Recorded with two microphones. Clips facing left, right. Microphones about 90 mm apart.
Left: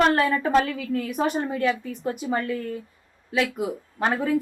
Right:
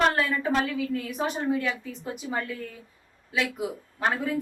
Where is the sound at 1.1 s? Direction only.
55° left (ahead or behind).